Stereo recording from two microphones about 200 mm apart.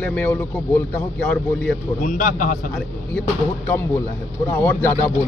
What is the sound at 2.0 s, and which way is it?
Speech, 40° left (ahead or behind).